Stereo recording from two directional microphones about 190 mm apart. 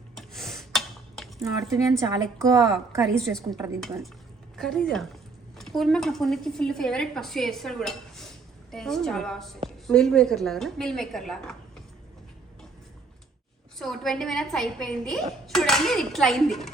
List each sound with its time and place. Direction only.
0.2 s a sound: centre (ahead or behind)
1.7 s a woman's voice: 15° right (ahead or behind)
3.2 s speech: centre (ahead or behind)
13.7 s speech: centre (ahead or behind)